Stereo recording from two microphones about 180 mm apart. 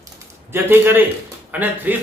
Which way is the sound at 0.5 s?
10° right (ahead or behind).